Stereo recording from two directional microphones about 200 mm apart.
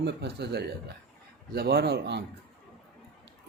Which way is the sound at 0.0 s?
55° right (ahead or behind).